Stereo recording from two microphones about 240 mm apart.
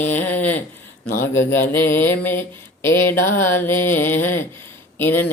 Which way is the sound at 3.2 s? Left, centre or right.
Left.